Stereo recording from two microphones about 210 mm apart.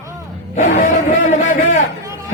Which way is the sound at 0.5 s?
35° left (ahead or behind).